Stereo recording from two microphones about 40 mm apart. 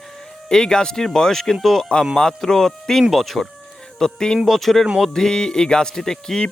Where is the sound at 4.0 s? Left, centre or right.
Centre.